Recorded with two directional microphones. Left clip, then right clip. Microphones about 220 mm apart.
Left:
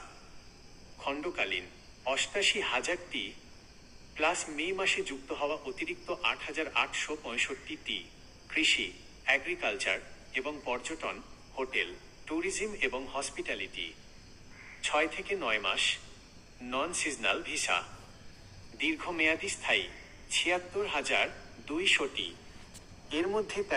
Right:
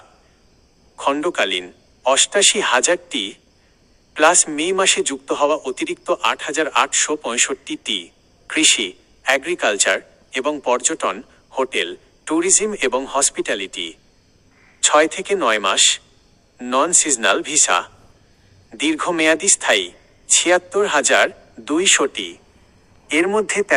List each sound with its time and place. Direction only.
0.9 s a man's voice: 45° right (ahead or behind)